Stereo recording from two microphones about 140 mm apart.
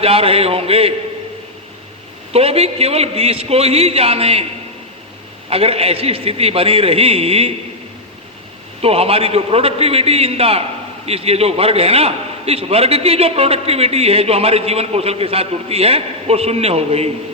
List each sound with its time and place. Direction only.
0.0 s a man's voice: 45° right (ahead or behind)
2.3 s a man's voice: 45° right (ahead or behind)
5.5 s a man's voice: 45° right (ahead or behind)
8.8 s a man's voice: 45° right (ahead or behind)